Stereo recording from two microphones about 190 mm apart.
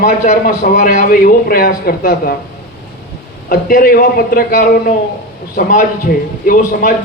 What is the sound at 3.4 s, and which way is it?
Speech, 50° left (ahead or behind).